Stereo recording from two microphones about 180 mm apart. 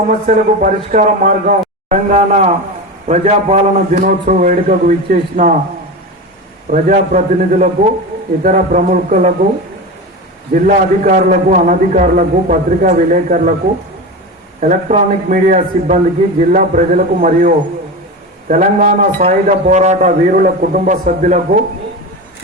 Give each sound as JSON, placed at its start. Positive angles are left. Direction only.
{"t": 0.1, "sound": "a man's voice", "side_deg": -45}
{"t": 6.7, "sound": "a man's voice", "side_deg": -45}
{"t": 10.5, "sound": "a man's voice", "side_deg": -50}
{"t": 14.6, "sound": "a man's voice", "side_deg": -45}